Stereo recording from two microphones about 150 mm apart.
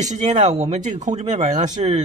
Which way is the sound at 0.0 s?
55° right (ahead or behind).